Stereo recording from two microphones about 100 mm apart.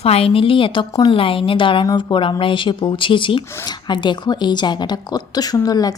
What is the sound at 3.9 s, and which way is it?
Speech, 45° left (ahead or behind).